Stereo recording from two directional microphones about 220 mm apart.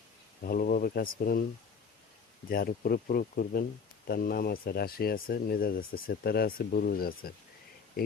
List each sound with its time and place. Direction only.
0.4 s speech: 40° left (ahead or behind)
2.5 s speech: 40° left (ahead or behind)